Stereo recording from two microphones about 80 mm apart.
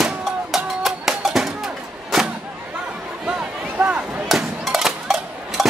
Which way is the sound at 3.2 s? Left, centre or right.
Centre.